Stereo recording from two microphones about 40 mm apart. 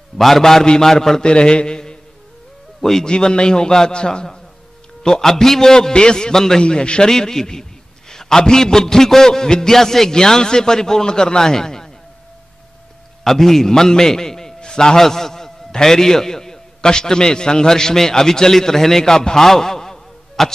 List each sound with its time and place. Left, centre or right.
0.2 s a man's voice: centre
1.2 s a man's voice: left
2.8 s a man's voice: centre
3.1 s a man's voice: left
6.6 s a man's voice: left
13.2 s a man's voice: centre